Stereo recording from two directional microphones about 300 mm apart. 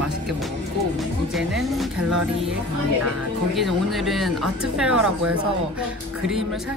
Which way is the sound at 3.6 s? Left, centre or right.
Centre.